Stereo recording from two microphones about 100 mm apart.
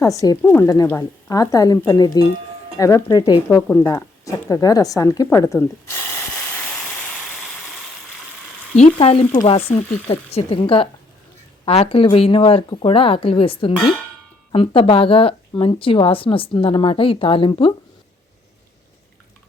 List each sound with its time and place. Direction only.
0.0 s speech: 35° left (ahead or behind)
0.4 s speech: 20° left (ahead or behind)
0.7 s speech: 35° left (ahead or behind)
3.8 s speech: 30° left (ahead or behind)
5.5 s speech: 20° left (ahead or behind)
6.6 s a sound: centre (ahead or behind)
8.7 s speech: 80° left
9.5 s speech: 90° left; by 10.8 s 65° left (ahead or behind)
11.6 s speech: 80° left; by 17.7 s 60° left (ahead or behind)